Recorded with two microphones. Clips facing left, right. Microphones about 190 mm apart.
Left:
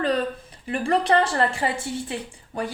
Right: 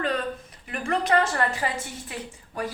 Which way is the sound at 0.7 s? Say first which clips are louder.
Left 3 dB; 30° left (ahead or behind).